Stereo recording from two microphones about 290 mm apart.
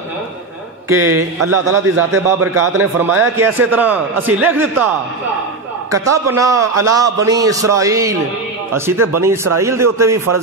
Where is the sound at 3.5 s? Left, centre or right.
Centre.